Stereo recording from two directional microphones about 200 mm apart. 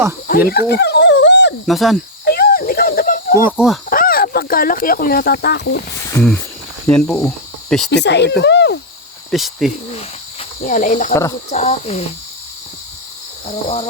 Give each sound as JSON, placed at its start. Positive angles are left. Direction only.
{"t": 0.3, "sound": "dog", "side_deg": 50}
{"t": 1.6, "sound": "speech", "side_deg": 0}
{"t": 2.2, "sound": "a sound", "side_deg": 50}
{"t": 3.4, "sound": "speech", "side_deg": -5}
{"t": 3.8, "sound": "speech", "side_deg": 45}
{"t": 6.8, "sound": "speech", "side_deg": 5}
{"t": 7.3, "sound": "cricket", "side_deg": 0}
{"t": 7.9, "sound": "speech", "side_deg": 60}
{"t": 9.3, "sound": "speech", "side_deg": 0}
{"t": 10.7, "sound": "speech", "side_deg": 40}
{"t": 11.1, "sound": "speech", "side_deg": 15}
{"t": 11.4, "sound": "speech", "side_deg": 35}